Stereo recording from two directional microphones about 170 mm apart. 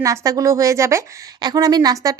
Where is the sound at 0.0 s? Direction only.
20° right (ahead or behind).